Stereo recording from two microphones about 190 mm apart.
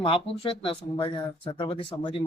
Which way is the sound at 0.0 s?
25° left (ahead or behind).